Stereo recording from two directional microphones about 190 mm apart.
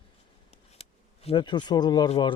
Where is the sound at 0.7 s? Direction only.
30° left (ahead or behind).